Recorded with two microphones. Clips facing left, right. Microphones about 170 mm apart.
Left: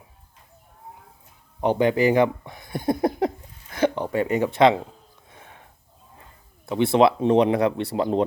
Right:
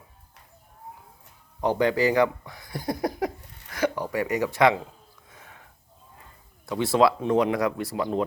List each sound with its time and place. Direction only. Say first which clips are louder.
1.6 s speech: left 3 dB; 20° left (ahead or behind)
5.3 s wheeze: left 3 dB; 25° left (ahead or behind)
6.7 s speech: left 3 dB; 20° left (ahead or behind)